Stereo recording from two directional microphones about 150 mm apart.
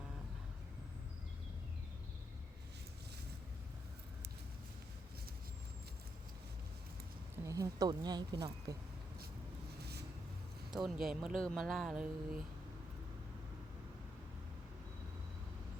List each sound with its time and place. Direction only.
7.4 s speech: 20° right (ahead or behind)
10.8 s speech: centre (ahead or behind)